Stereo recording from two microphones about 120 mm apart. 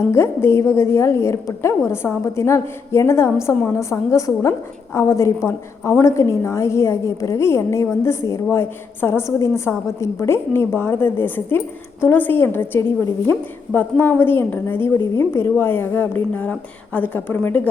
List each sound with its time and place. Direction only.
0.1 s a woman's voice: 20° left (ahead or behind)